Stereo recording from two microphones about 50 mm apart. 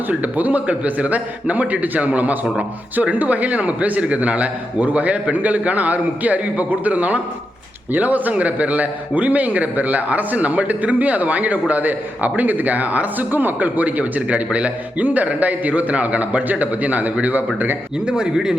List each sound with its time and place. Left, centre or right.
0.1 s a man's voice: right
18.0 s speech: centre